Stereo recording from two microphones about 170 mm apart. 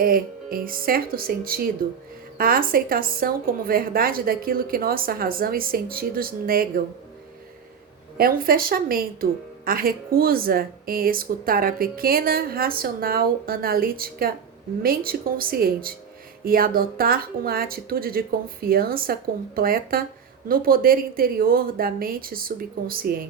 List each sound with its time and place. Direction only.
0.0 s a woman's voice: 60° right (ahead or behind)
8.2 s a woman's voice: 60° right (ahead or behind)